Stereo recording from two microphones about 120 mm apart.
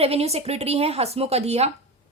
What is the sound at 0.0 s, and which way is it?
A woman's voice, 55° right (ahead or behind).